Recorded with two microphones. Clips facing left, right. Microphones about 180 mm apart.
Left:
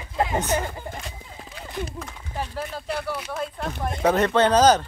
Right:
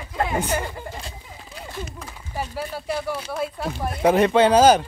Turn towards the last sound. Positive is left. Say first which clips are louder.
# right 2 dB
turn(degrees=-10)  # may be behind; listen again after turning